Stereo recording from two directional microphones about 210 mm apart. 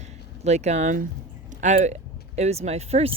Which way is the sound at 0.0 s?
35° right (ahead or behind).